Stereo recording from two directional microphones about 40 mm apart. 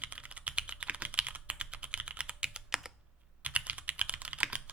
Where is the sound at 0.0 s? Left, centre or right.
Right.